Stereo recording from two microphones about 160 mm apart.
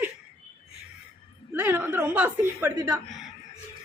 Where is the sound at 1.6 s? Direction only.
10° right (ahead or behind).